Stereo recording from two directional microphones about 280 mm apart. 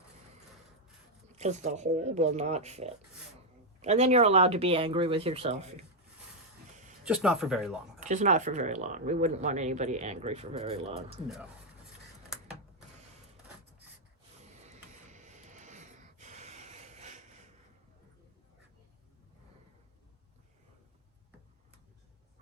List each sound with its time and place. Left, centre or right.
1.4 s speech: right
7.0 s speech: centre
7.9 s speech: right
14.7 s a sound: right